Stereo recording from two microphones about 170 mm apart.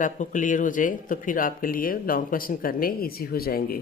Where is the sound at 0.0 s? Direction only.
50° left (ahead or behind).